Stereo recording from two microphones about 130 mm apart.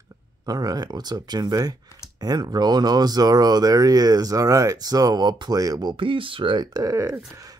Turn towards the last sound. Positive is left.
turn(degrees=-25)  # may be behind; listen again after turning